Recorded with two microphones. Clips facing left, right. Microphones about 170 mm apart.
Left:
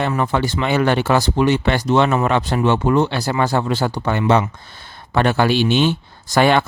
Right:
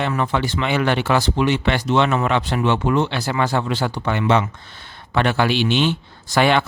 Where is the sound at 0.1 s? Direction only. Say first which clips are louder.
Left 2 dB; 40° left (ahead or behind).